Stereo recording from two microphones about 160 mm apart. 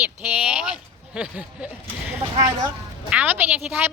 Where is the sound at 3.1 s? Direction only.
10° right (ahead or behind).